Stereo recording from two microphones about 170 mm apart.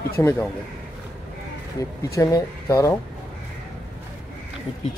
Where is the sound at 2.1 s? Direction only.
20° left (ahead or behind).